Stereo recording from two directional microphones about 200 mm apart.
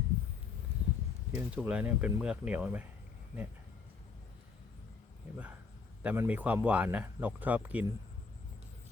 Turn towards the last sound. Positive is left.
turn(degrees=-10)  # may be behind; listen again after turning